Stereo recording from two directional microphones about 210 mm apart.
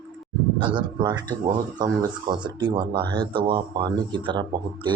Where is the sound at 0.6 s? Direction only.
20° right (ahead or behind).